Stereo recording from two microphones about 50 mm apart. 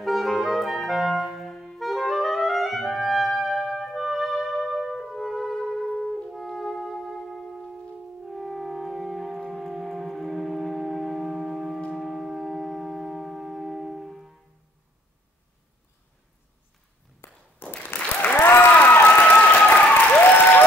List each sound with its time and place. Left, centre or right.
0.0 s clarinet: centre
4.7 s music: centre
11.9 s a sound: centre
17.2 s a sound: left
17.8 s applause: left
19.7 s applause: left
20.1 s applause: left